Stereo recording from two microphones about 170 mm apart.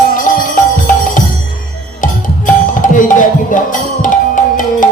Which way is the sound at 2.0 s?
50° left (ahead or behind).